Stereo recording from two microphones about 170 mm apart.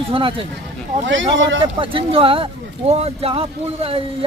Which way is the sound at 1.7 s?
30° right (ahead or behind).